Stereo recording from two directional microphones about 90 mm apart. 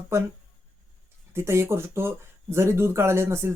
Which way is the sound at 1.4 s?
30° right (ahead or behind).